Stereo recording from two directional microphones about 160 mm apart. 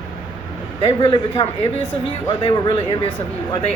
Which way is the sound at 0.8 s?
30° left (ahead or behind).